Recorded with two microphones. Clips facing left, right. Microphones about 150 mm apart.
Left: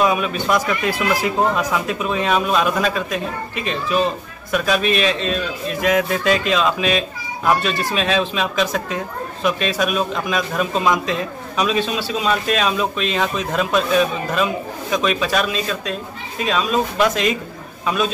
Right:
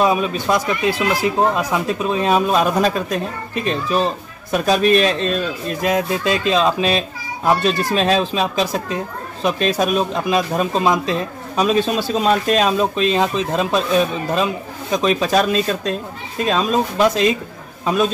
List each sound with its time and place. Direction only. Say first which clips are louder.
0.0 s a man's voice: right 1 dB; 30° right (ahead or behind)